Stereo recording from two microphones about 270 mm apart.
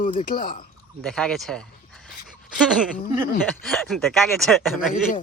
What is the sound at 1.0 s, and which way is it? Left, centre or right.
Speech, centre.